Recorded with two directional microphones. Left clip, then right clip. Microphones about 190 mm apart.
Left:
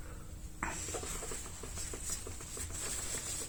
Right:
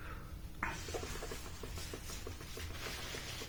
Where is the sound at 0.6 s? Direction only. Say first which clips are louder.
Left 1 dB; 45° left (ahead or behind).